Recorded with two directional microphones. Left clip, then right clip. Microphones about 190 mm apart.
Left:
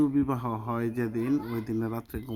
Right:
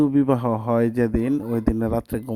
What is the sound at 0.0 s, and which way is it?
A man's voice, 45° right (ahead or behind).